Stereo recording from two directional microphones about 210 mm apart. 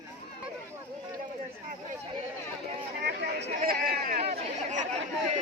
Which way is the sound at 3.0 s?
50° right (ahead or behind).